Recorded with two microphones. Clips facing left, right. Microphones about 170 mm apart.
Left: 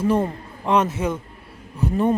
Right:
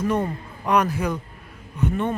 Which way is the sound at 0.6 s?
25° left (ahead or behind).